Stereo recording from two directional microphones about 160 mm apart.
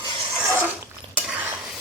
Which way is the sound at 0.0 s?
15° right (ahead or behind).